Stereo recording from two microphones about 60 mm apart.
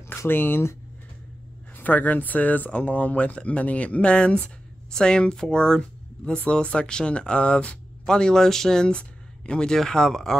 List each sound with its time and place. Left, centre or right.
0.3 s speech: left
1.8 s speech: left; by 10.3 s centre